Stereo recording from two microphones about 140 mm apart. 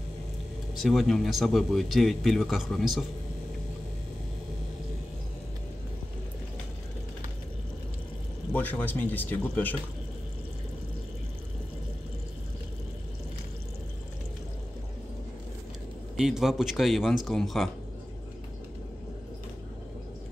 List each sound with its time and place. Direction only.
0.7 s speech: centre (ahead or behind)
8.5 s speech: 15° left (ahead or behind)
16.2 s speech: 5° right (ahead or behind)